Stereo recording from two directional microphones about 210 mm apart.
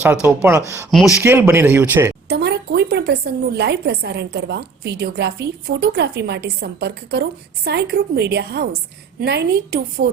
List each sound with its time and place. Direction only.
0.0 s speech: 5° right (ahead or behind)
0.9 s speech: centre (ahead or behind)
2.3 s a woman's voice: 50° right (ahead or behind)